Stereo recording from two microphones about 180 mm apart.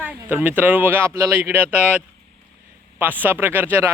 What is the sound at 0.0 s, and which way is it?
Speech, 10° right (ahead or behind).